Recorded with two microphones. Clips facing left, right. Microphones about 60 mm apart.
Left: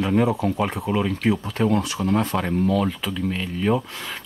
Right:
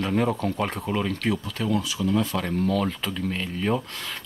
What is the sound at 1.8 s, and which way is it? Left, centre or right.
Speech, left.